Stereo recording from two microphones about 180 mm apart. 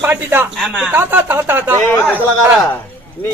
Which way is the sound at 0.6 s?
Centre (ahead or behind).